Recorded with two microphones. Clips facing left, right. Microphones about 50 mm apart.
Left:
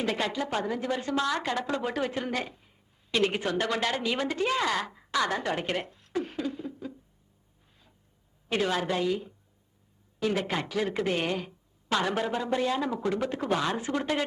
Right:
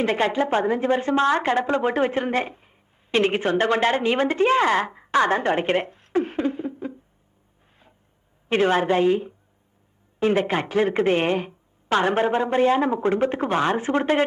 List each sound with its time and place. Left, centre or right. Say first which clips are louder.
0.0 s a woman's voice: right 8 dB; right
8.4 s a woman's voice: right 8 dB; right